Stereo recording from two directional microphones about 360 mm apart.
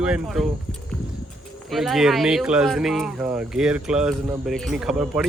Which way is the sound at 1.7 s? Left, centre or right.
Centre.